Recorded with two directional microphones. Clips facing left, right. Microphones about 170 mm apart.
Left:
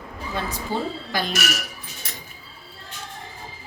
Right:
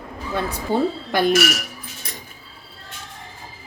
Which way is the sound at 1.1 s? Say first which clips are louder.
Right 10 dB; 55° right (ahead or behind).